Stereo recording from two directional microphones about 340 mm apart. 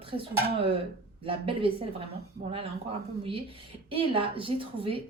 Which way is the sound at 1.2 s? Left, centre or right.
Centre.